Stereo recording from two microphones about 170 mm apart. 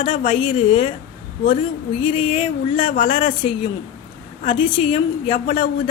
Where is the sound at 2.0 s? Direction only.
35° left (ahead or behind).